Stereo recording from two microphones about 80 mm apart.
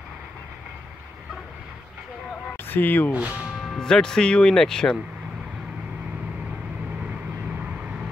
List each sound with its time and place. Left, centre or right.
2.5 s a sound: left
3.1 s speech: centre
3.4 s speech: centre